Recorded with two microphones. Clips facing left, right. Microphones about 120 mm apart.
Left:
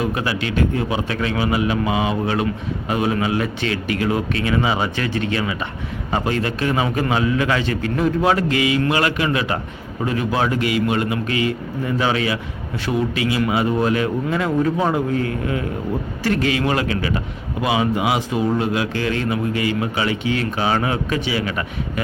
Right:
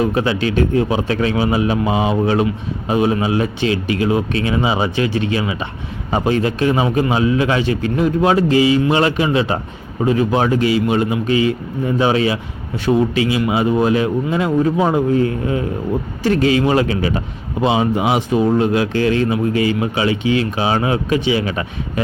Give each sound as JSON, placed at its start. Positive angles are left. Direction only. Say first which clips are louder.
{"t": 0.0, "sound": "a man's voice", "louder": "right 5 dB", "side_deg": -30}